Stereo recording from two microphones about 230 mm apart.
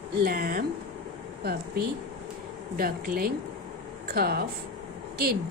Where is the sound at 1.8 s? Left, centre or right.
Right.